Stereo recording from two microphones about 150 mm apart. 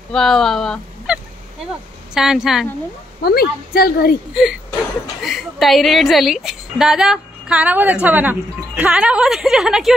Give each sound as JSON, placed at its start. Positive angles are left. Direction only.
{"t": 0.1, "sound": "speech", "side_deg": 5}
{"t": 2.1, "sound": "a woman's voice", "side_deg": -5}
{"t": 3.2, "sound": "speech", "side_deg": 90}
{"t": 5.2, "sound": "a woman's voice", "side_deg": 0}